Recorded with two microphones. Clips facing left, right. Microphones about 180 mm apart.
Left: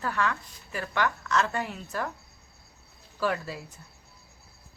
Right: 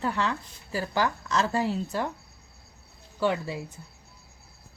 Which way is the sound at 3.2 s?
20° right (ahead or behind).